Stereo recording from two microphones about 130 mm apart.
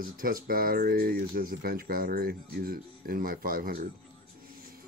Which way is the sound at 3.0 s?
90° right.